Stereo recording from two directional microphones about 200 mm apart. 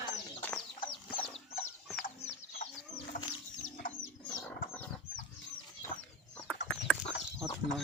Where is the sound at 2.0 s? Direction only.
45° left (ahead or behind).